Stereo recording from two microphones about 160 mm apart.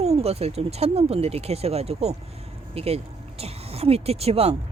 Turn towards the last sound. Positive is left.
turn(degrees=-40)  # may be behind; listen again after turning